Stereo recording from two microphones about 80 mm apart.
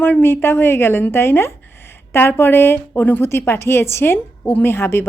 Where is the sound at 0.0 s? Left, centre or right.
Left.